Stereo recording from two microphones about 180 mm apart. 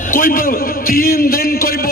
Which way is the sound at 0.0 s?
50° left (ahead or behind).